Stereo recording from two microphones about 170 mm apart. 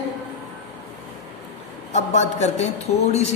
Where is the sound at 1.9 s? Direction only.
40° left (ahead or behind).